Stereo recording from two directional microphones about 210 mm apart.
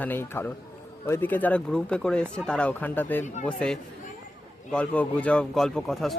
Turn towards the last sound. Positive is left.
turn(degrees=0)  # may be behind; listen again after turning